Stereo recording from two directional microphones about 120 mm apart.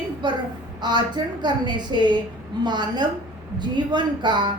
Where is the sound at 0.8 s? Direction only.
35° right (ahead or behind).